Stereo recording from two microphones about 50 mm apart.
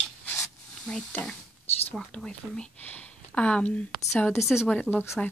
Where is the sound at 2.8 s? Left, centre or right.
Left.